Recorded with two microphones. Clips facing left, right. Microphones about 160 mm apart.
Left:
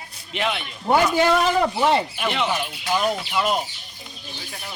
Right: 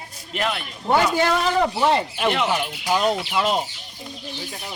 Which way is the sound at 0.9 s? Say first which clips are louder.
Left 1 dB; centre (ahead or behind).